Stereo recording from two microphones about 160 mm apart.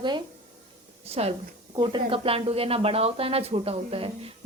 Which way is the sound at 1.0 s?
40° right (ahead or behind).